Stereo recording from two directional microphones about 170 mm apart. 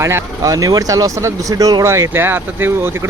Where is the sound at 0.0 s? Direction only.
15° right (ahead or behind).